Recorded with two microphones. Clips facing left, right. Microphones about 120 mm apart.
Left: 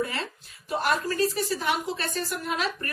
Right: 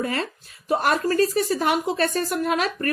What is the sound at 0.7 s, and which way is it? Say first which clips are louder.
A woman's voice: right 5 dB; 50° right (ahead or behind).